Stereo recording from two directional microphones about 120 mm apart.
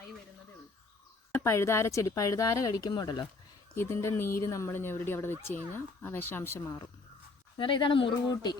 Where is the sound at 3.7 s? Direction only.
20° left (ahead or behind).